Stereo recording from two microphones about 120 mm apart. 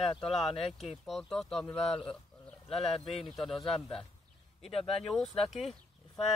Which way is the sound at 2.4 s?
Centre (ahead or behind).